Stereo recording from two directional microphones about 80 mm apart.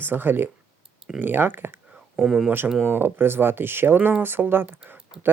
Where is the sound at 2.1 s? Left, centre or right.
Centre.